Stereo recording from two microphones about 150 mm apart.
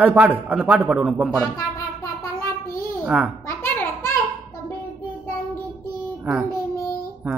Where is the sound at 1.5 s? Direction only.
20° left (ahead or behind).